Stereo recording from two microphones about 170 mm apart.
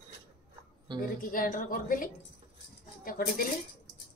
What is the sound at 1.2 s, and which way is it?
Speech, 50° left (ahead or behind).